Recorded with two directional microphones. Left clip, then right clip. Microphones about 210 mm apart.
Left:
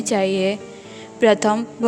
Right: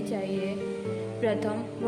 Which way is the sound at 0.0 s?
50° left (ahead or behind).